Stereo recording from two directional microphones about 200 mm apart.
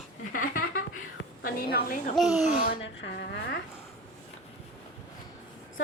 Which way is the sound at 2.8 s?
65° left (ahead or behind).